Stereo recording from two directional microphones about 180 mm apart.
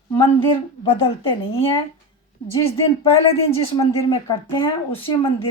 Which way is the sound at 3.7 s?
20° left (ahead or behind).